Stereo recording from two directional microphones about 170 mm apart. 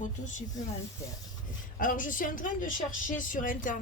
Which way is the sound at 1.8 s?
50° left (ahead or behind).